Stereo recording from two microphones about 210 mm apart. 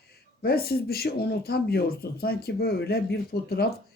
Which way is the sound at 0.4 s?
45° left (ahead or behind).